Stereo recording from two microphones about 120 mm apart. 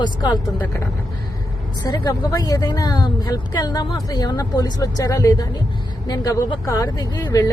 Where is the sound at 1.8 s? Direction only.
30° left (ahead or behind).